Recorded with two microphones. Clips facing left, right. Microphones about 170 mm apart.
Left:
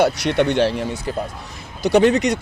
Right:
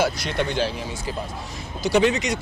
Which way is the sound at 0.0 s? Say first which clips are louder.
Left 6 dB; 70° left (ahead or behind).